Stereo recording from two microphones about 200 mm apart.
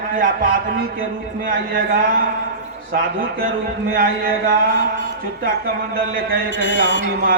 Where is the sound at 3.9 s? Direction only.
45° right (ahead or behind).